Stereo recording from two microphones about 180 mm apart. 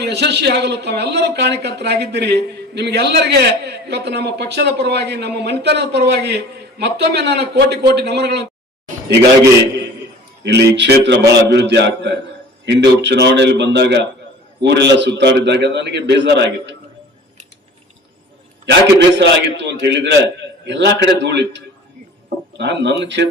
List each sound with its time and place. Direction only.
0.0 s a man's voice: 70° right (ahead or behind)
10.4 s a man's voice: 70° right (ahead or behind)
18.6 s a man's voice: 75° right (ahead or behind)